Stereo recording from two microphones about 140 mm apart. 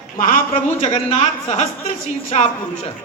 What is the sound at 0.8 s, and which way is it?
A woman's voice, 50° left (ahead or behind).